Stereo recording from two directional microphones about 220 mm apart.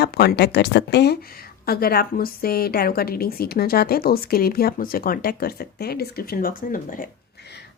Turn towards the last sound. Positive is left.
turn(degrees=50)  # may be behind; listen again after turning